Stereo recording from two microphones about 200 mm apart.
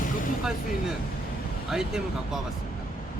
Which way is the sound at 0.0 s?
40° left (ahead or behind).